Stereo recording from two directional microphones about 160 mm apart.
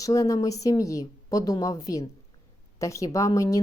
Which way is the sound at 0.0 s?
20° left (ahead or behind).